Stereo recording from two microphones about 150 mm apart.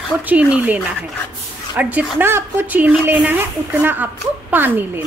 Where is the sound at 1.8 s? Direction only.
10° right (ahead or behind).